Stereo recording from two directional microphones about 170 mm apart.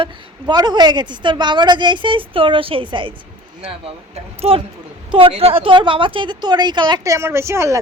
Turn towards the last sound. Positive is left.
turn(degrees=-15)  # may be behind; listen again after turning